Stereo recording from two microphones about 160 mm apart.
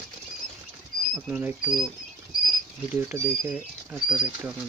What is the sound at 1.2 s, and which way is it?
Speech, 10° right (ahead or behind).